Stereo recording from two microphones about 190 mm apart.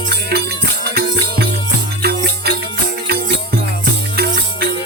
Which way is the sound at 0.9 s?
55° right (ahead or behind).